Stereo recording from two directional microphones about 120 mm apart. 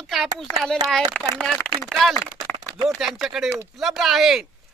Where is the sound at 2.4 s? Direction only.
35° right (ahead or behind).